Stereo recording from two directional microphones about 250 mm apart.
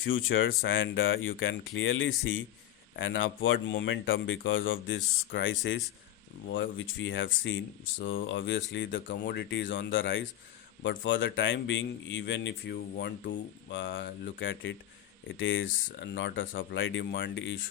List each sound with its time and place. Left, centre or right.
0.3 s speech: left
8.0 s speech: left
8.4 s speech: left